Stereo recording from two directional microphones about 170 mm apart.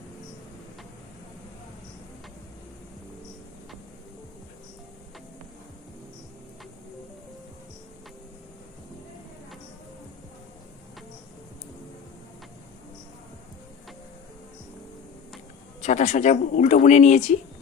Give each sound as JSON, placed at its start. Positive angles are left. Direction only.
{"t": 15.8, "sound": "speech", "side_deg": 45}